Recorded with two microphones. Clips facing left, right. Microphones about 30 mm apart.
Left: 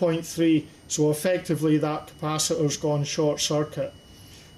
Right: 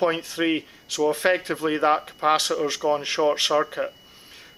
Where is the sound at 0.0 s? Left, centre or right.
Right.